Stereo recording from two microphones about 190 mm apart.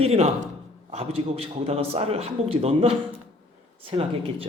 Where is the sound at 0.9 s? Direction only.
30° right (ahead or behind).